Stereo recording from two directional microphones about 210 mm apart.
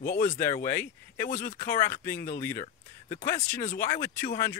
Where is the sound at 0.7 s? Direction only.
10° left (ahead or behind).